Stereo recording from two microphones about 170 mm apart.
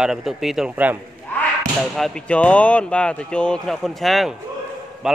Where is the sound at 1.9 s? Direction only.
5° left (ahead or behind).